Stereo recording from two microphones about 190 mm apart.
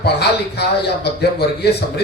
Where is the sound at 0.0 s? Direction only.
60° left (ahead or behind).